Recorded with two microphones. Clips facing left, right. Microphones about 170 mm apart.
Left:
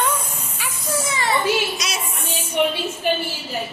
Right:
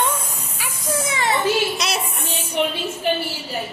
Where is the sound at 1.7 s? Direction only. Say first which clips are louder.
Right 4 dB; 60° right (ahead or behind).